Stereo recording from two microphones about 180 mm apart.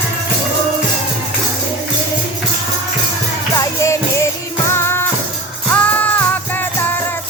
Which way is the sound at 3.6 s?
15° left (ahead or behind).